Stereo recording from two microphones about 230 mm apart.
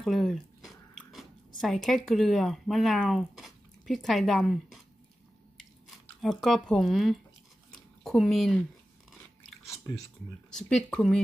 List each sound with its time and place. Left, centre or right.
0.0 s speech: centre
6.2 s speech: centre
7.7 s a sound: centre
10.5 s speech: centre